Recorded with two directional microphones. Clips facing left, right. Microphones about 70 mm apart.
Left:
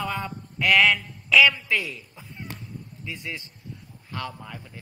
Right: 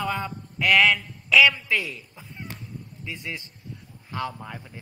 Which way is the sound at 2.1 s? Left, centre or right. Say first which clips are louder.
Even; centre.